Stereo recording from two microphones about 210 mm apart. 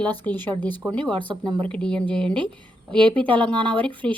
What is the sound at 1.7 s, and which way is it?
Speech, 5° left (ahead or behind).